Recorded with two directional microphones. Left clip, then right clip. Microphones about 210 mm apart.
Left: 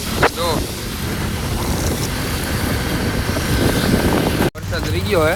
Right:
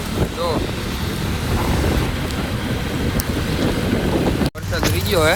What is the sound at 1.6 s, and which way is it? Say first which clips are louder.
Vehicle: right 2 dB; centre (ahead or behind).